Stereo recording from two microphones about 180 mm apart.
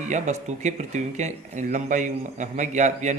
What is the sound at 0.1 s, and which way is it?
A man's voice, 40° right (ahead or behind).